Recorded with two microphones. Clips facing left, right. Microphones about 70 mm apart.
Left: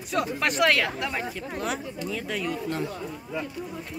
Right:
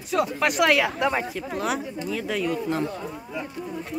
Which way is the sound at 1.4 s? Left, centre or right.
Centre.